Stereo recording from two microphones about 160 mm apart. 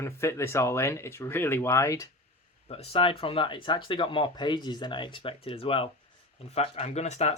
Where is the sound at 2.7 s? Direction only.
35° left (ahead or behind).